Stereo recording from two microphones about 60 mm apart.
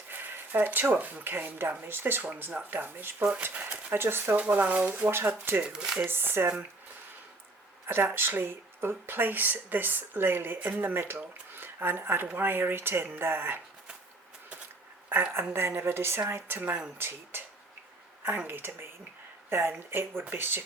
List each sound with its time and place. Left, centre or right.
0.1 s speech: right
3.4 s speech: right
3.9 s speech: right
4.4 s speech: right
5.6 s speech: centre
6.0 s speech: right
7.9 s speech: right
15.1 s speech: right